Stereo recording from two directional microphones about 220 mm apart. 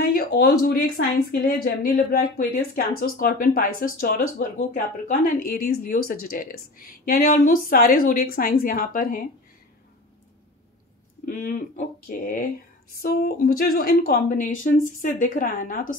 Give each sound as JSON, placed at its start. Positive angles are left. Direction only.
{"t": 0.0, "sound": "speech", "side_deg": 45}
{"t": 11.2, "sound": "speech", "side_deg": 40}